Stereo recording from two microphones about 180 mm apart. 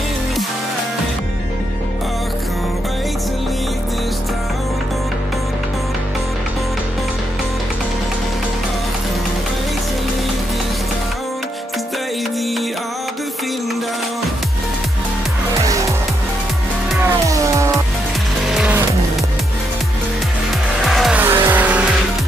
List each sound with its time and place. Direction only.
15.6 s music: 20° right (ahead or behind)
17.3 s music: 15° right (ahead or behind)
18.4 s music: 5° right (ahead or behind)
20.8 s vehicle: centre (ahead or behind)